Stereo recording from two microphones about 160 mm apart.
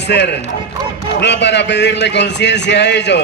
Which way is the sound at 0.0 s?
90° left.